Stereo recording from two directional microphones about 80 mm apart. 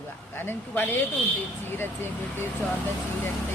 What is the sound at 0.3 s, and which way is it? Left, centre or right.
Speech, left.